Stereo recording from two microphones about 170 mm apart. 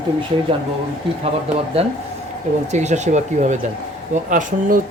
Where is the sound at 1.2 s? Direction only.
35° right (ahead or behind).